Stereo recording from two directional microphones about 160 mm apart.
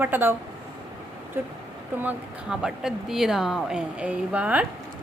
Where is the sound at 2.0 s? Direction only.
10° right (ahead or behind).